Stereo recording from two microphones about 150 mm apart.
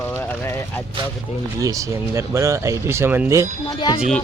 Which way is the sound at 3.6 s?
30° left (ahead or behind).